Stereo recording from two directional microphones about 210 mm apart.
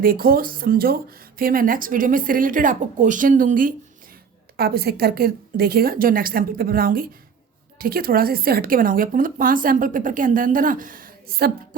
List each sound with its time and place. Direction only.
0.0 s a woman's voice: 45° right (ahead or behind)